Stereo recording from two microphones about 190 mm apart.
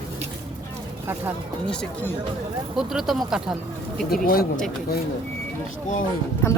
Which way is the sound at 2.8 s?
Centre (ahead or behind).